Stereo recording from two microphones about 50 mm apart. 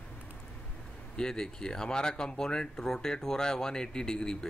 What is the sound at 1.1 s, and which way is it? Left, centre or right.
Speech, centre.